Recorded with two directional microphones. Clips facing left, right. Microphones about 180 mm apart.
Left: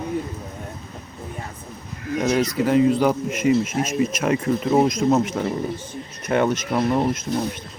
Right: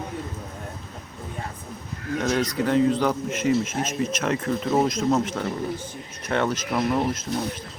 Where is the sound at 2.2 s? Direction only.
10° left (ahead or behind).